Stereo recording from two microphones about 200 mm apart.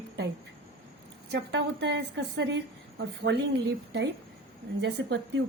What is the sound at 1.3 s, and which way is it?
A woman's voice, 55° right (ahead or behind).